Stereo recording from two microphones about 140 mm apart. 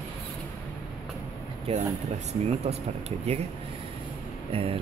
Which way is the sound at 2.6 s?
50° right (ahead or behind).